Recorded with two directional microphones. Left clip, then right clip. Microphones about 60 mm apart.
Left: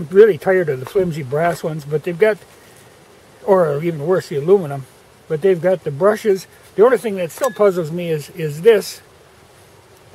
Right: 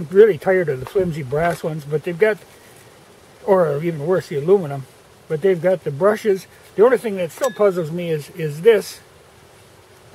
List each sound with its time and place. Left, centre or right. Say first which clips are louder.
0.1 s speech: left 2 dB; left
3.4 s speech: left 2 dB; left